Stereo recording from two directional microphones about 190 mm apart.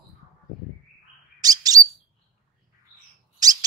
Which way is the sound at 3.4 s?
20° right (ahead or behind).